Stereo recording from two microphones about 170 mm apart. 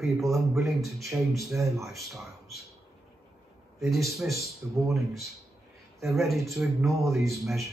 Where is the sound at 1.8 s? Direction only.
Centre (ahead or behind).